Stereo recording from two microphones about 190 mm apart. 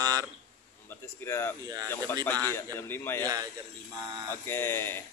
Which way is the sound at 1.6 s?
20° right (ahead or behind).